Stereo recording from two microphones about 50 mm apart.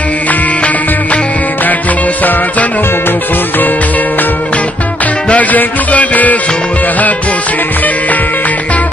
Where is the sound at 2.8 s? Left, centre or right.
Left.